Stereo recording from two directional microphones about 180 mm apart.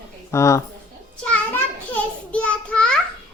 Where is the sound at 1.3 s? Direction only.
10° left (ahead or behind).